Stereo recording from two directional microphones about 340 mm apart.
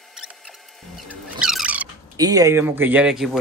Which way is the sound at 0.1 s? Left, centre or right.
Centre.